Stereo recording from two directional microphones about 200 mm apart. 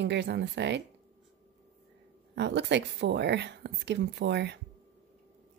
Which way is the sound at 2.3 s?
60° right (ahead or behind).